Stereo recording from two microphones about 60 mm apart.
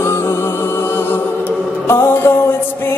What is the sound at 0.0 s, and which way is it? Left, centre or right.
Music, left.